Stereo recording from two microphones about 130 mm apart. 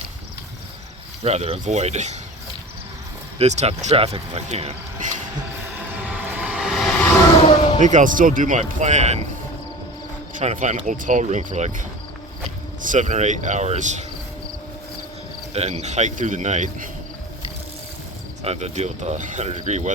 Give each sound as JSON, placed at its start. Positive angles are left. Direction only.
{"t": 1.2, "sound": "speech", "side_deg": -55}
{"t": 3.3, "sound": "speech", "side_deg": -60}
{"t": 5.9, "sound": "vehicle", "side_deg": -10}
{"t": 7.4, "sound": "slam", "side_deg": 40}
{"t": 7.9, "sound": "speech", "side_deg": -85}
{"t": 10.3, "sound": "speech", "side_deg": -70}
{"t": 10.8, "sound": "speech", "side_deg": -85}
{"t": 15.5, "sound": "speech", "side_deg": -60}
{"t": 18.4, "sound": "speech", "side_deg": -55}